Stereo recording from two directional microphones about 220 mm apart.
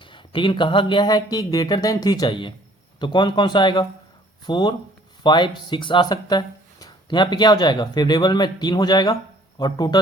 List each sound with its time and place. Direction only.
0.0 s speech: 20° left (ahead or behind)